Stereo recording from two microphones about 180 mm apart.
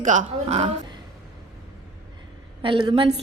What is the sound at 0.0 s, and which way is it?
Speech, 45° right (ahead or behind).